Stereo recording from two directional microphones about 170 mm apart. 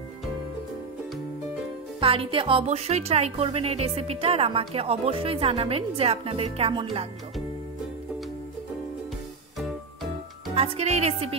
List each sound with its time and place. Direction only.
2.0 s speech: 30° right (ahead or behind)
10.5 s speech: 35° right (ahead or behind)